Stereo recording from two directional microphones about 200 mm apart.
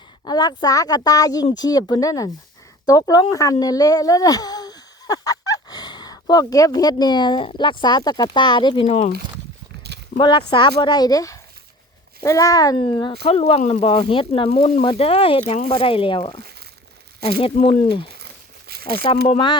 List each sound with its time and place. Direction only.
0.3 s speech: 20° left (ahead or behind)
10.2 s speech: 25° left (ahead or behind)
18.7 s a sound: 50° right (ahead or behind)
19.3 s speech: 25° left (ahead or behind)